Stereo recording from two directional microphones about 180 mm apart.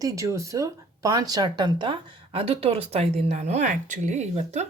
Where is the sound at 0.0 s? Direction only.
15° right (ahead or behind).